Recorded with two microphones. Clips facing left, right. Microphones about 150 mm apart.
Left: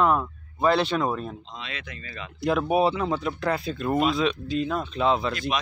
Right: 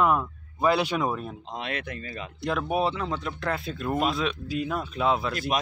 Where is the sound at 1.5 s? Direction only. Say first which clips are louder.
Right 5 dB; 55° right (ahead or behind).